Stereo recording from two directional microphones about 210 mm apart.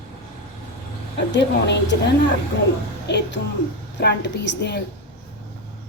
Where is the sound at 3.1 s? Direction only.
55° left (ahead or behind).